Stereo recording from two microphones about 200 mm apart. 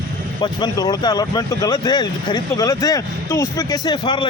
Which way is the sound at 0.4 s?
20° left (ahead or behind).